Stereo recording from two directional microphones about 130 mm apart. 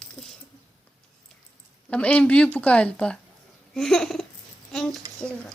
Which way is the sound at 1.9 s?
10° left (ahead or behind).